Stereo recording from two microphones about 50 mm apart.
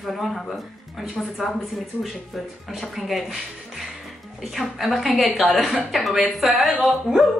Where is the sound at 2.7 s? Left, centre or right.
Centre.